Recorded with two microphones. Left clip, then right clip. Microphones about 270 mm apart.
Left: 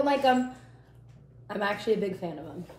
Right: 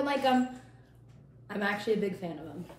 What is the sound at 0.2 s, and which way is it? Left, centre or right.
Speech, left.